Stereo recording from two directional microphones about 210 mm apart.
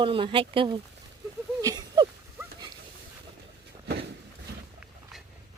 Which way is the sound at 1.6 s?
15° right (ahead or behind).